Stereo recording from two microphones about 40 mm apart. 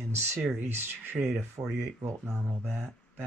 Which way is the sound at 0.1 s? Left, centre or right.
Right.